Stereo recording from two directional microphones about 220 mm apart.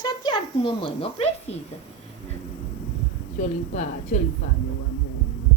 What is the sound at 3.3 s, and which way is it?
Speech, 35° left (ahead or behind).